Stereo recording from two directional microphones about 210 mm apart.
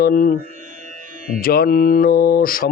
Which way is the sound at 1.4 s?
45° left (ahead or behind).